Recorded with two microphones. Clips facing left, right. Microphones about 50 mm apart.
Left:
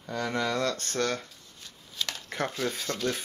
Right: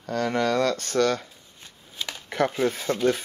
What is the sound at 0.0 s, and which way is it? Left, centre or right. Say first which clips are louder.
Speech: right 6 dB; right.